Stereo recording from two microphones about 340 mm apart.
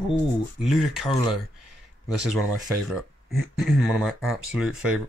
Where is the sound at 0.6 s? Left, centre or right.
Centre.